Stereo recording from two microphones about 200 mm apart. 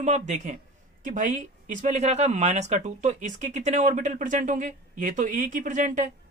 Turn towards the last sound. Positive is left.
turn(degrees=-40)  # may be behind; listen again after turning